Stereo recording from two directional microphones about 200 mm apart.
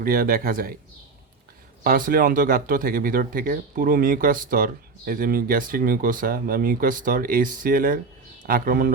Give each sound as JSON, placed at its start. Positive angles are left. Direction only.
{"t": 0.0, "sound": "speech", "side_deg": -45}
{"t": 1.8, "sound": "speech", "side_deg": -45}